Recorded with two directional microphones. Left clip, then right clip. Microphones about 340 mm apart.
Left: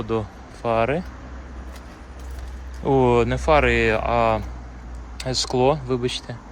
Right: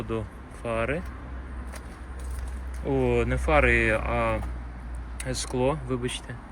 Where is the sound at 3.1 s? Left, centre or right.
Centre.